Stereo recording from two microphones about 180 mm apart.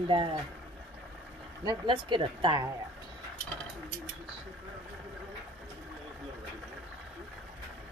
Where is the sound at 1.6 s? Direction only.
25° right (ahead or behind).